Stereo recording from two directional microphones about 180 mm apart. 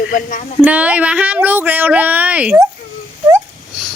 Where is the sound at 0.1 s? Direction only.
45° left (ahead or behind).